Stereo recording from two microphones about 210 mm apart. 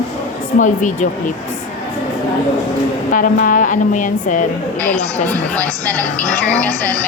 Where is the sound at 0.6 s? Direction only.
35° left (ahead or behind).